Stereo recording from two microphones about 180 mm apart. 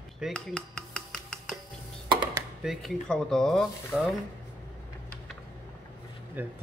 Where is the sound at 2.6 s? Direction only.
Centre (ahead or behind).